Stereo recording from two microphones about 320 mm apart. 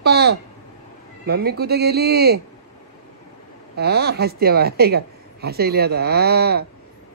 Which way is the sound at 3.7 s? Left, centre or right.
Right.